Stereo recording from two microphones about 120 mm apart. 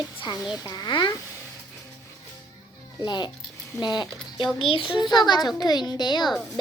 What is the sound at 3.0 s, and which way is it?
A woman's voice, 40° left (ahead or behind).